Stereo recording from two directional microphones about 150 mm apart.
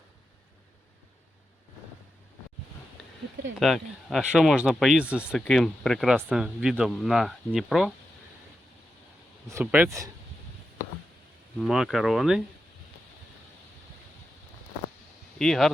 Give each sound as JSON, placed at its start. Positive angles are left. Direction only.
{"t": 3.6, "sound": "speech", "side_deg": 0}
{"t": 9.5, "sound": "speech", "side_deg": -15}
{"t": 11.6, "sound": "speech", "side_deg": 0}
{"t": 15.4, "sound": "speech", "side_deg": 5}